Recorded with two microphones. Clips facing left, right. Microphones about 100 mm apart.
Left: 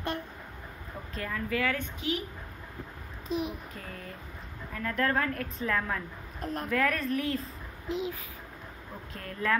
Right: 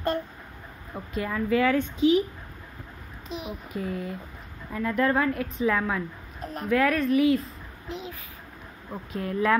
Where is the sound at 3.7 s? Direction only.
15° right (ahead or behind).